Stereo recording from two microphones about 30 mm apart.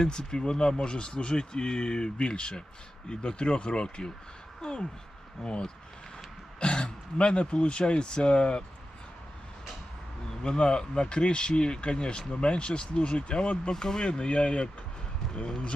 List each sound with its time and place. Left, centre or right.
0.0 s speech: left
10.4 s speech: left
13.7 s speech: left
14.0 s speech: left